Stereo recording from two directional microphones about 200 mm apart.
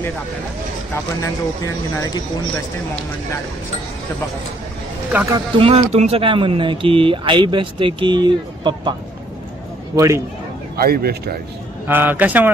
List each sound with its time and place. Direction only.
5.1 s a man's voice: 10° right (ahead or behind)
5.6 s speech: 30° right (ahead or behind)
9.9 s a man's voice: 15° right (ahead or behind)
10.8 s speech: 50° right (ahead or behind)
11.9 s a man's voice: 10° right (ahead or behind)